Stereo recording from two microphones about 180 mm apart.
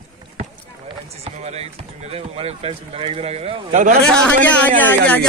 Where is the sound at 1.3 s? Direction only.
35° right (ahead or behind).